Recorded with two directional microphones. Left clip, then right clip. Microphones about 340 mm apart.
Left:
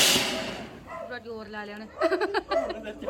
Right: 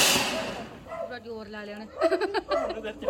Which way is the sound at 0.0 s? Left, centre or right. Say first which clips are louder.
Even; centre.